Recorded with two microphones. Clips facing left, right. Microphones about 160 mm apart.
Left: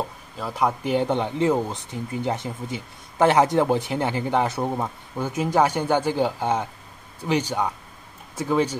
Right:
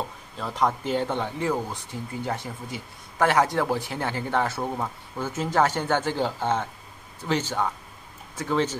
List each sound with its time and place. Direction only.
0.4 s speech: 5° left (ahead or behind)